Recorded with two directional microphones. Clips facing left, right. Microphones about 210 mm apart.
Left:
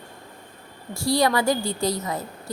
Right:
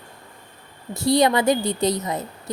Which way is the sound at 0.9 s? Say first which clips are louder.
Right 3 dB; 20° right (ahead or behind).